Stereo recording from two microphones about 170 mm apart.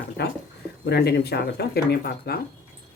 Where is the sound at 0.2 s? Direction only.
75° left (ahead or behind).